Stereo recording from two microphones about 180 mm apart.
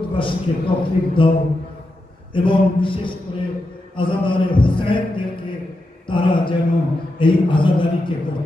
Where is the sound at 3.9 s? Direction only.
30° left (ahead or behind).